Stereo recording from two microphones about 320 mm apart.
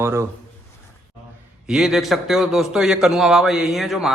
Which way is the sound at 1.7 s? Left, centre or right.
Centre.